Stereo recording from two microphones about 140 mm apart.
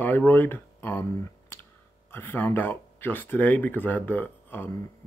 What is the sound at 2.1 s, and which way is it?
Speech, 15° left (ahead or behind).